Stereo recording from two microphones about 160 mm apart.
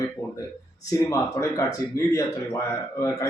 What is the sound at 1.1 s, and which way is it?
A man's voice, 20° left (ahead or behind).